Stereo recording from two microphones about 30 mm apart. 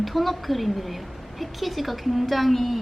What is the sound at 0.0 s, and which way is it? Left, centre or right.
A woman's voice, centre.